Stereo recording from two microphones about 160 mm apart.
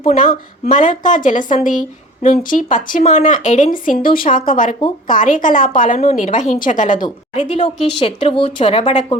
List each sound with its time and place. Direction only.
0.2 s a woman's voice: 55° left (ahead or behind)
7.5 s a woman's voice: 35° left (ahead or behind)
8.8 s a woman's voice: 45° left (ahead or behind)